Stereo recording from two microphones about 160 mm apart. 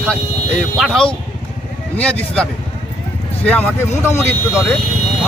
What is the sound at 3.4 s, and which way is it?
Speech, 10° left (ahead or behind).